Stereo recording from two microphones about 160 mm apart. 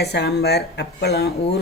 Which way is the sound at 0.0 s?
90° left.